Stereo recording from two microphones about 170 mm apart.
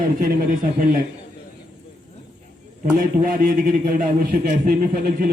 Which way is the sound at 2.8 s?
55° right (ahead or behind).